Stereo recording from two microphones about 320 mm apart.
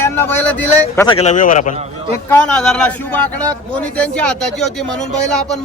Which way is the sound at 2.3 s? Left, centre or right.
Centre.